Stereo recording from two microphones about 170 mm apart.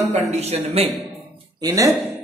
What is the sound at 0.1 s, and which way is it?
Speech, 40° right (ahead or behind).